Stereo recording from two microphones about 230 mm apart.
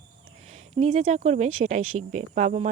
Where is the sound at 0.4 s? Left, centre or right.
Right.